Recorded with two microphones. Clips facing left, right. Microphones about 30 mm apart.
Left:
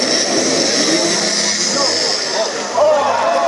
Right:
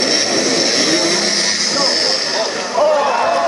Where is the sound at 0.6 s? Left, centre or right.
Right.